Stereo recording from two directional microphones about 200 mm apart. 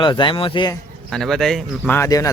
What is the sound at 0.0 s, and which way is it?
Speech, 25° left (ahead or behind).